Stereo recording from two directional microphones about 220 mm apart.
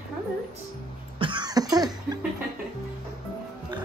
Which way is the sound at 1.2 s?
20° right (ahead or behind).